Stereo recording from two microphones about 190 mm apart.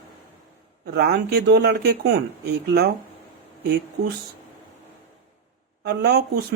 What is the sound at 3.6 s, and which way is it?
Speech, 60° right (ahead or behind).